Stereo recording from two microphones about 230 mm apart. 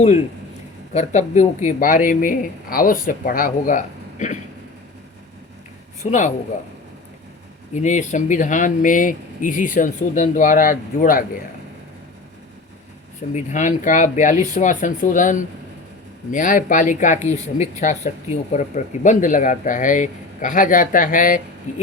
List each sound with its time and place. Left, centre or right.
0.9 s speech: left
6.0 s speech: left
7.7 s speech: left
13.3 s speech: left